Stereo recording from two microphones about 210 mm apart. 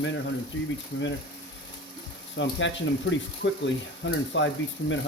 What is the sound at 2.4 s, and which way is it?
Speech, 60° left (ahead or behind).